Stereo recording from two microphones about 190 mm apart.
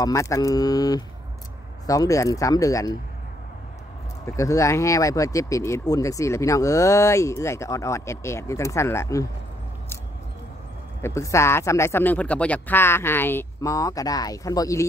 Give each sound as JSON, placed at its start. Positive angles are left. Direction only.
{"t": 0.0, "sound": "speech", "side_deg": 15}
{"t": 4.4, "sound": "speech", "side_deg": 15}
{"t": 11.0, "sound": "speech", "side_deg": 15}